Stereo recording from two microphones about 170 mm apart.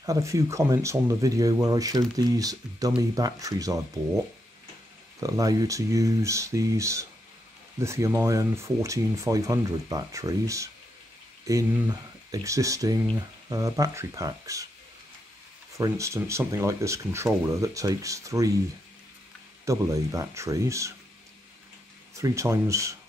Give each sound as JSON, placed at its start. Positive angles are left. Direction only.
{"t": 0.0, "sound": "speech", "side_deg": -20}
{"t": 5.2, "sound": "speech", "side_deg": -20}
{"t": 15.7, "sound": "speech", "side_deg": -20}
{"t": 19.6, "sound": "speech", "side_deg": -20}
{"t": 22.1, "sound": "speech", "side_deg": -15}